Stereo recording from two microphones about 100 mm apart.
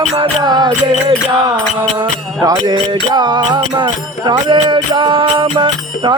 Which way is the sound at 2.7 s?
50° right (ahead or behind).